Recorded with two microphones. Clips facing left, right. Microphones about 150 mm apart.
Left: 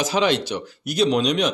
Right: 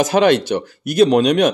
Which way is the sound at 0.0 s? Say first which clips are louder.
Right 7 dB; 55° right (ahead or behind).